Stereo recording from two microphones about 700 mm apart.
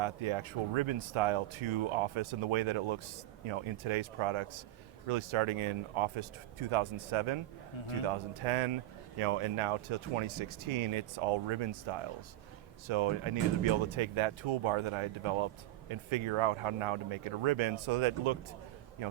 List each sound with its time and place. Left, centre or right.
0.0 s speech: right